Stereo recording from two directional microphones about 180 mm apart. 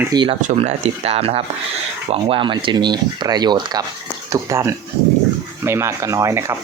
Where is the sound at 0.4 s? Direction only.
35° right (ahead or behind).